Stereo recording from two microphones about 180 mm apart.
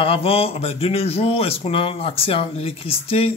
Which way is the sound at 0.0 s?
30° left (ahead or behind).